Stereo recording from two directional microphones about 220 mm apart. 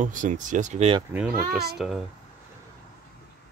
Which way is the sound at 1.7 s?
Centre (ahead or behind).